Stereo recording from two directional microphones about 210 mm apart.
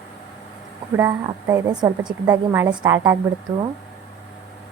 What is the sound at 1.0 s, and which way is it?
A woman's voice, 10° right (ahead or behind).